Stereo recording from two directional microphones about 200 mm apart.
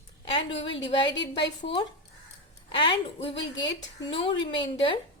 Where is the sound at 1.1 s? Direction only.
60° left (ahead or behind).